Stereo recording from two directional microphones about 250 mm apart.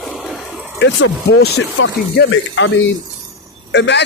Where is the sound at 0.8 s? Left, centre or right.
Left.